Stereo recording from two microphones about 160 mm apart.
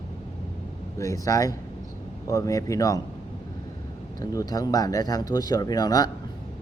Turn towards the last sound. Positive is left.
turn(degrees=25)  # may be behind; listen again after turning